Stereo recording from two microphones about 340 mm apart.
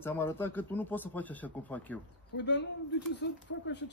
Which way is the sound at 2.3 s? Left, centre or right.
Left.